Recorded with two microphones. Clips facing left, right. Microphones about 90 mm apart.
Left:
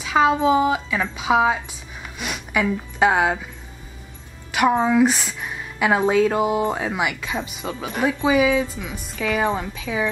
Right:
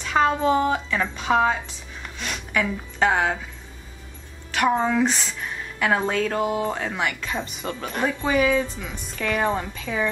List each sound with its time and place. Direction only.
0.0 s a woman's voice: 5° left (ahead or behind)
4.5 s a woman's voice: 10° left (ahead or behind)